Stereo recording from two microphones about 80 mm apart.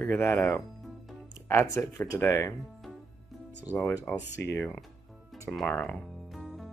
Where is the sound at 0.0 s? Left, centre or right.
Left.